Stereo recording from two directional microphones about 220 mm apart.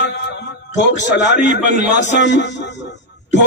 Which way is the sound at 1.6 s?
35° right (ahead or behind).